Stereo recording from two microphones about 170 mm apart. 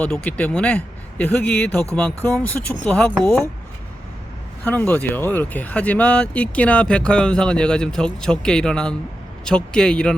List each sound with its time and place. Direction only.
0.0 s speech: 10° left (ahead or behind)
4.6 s speech: 10° left (ahead or behind)